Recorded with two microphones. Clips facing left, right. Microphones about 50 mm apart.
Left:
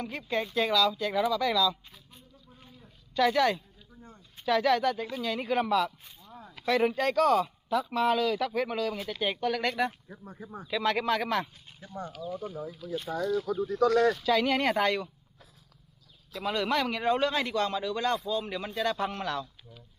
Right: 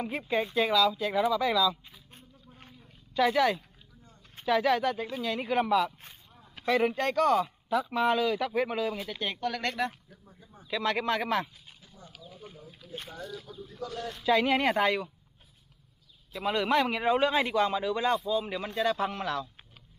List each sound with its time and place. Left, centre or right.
0.0 s speech: centre
3.2 s speech: centre
10.1 s speech: left
10.7 s speech: centre
13.5 s speech: left
14.2 s speech: centre
16.3 s speech: centre